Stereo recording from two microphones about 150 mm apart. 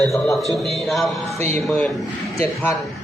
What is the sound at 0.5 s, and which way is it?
Speech, centre (ahead or behind).